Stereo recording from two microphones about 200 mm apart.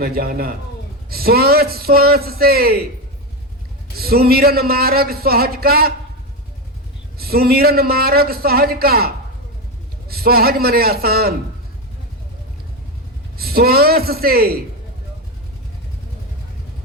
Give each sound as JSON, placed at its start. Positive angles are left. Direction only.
{"t": 0.0, "sound": "speech", "side_deg": -50}
{"t": 3.9, "sound": "speech", "side_deg": -50}
{"t": 7.2, "sound": "speech", "side_deg": -50}
{"t": 13.3, "sound": "speech", "side_deg": -50}